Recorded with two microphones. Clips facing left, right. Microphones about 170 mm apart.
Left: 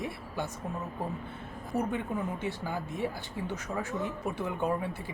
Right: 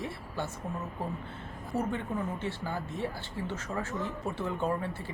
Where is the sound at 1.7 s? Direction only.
15° left (ahead or behind).